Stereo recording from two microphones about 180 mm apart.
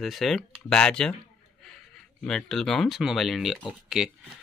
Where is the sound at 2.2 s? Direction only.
Centre (ahead or behind).